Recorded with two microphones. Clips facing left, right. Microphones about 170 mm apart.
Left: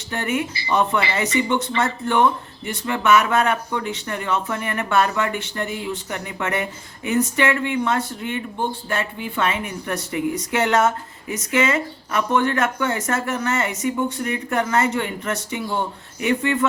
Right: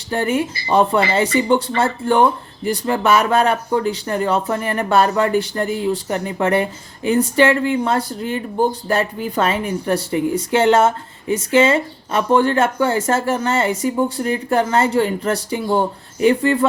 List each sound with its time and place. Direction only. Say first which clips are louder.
0.1 s speech: right 5 dB; 30° right (ahead or behind)